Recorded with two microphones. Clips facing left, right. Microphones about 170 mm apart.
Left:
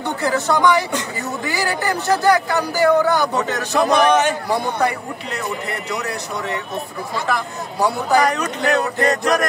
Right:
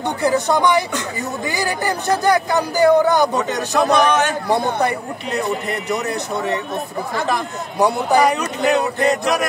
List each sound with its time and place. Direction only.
0.2 s speech: 15° right (ahead or behind)
3.7 s a man's voice: 10° left (ahead or behind)
7.8 s speech: 15° right (ahead or behind)